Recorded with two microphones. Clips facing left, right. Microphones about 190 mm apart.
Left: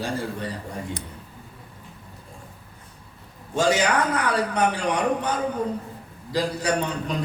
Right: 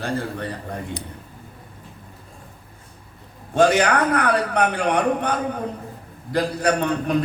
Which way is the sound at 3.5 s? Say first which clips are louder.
Right 4 dB; 60° right (ahead or behind).